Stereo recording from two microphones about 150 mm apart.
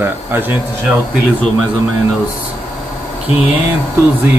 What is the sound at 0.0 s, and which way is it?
Speech, 15° right (ahead or behind).